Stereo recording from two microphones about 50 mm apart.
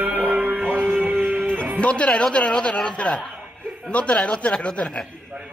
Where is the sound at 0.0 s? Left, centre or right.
Right.